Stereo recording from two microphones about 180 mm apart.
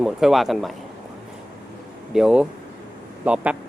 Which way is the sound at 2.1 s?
5° right (ahead or behind).